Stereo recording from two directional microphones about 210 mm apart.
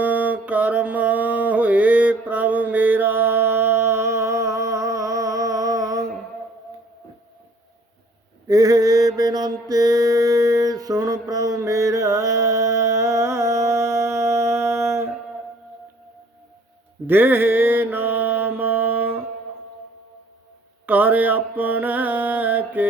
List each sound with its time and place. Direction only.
0.0 s mantra: 5° right (ahead or behind)
8.4 s mantra: 15° right (ahead or behind)
17.1 s mantra: 10° right (ahead or behind)
20.8 s mantra: 10° right (ahead or behind)